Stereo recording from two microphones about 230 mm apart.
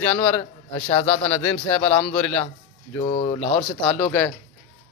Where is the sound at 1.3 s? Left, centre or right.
Centre.